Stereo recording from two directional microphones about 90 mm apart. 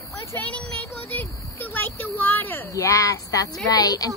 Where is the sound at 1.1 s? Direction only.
20° left (ahead or behind).